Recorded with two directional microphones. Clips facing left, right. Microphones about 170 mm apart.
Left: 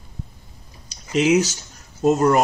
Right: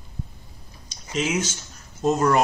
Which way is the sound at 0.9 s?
40° left (ahead or behind).